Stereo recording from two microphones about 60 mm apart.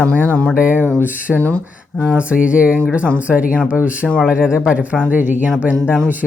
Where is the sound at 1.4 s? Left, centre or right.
Left.